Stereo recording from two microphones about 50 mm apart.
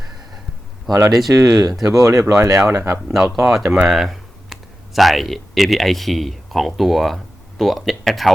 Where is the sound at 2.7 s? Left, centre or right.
Right.